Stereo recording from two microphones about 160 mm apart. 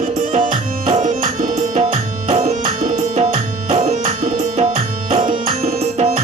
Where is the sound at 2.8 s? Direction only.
55° right (ahead or behind).